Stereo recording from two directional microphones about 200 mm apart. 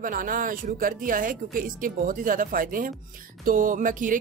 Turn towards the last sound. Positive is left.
turn(degrees=-40)  # may be behind; listen again after turning